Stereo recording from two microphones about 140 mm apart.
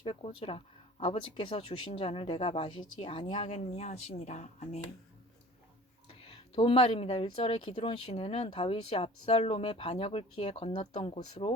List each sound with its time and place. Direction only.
0.0 s speech: 45° left (ahead or behind)
6.1 s speech: 45° left (ahead or behind)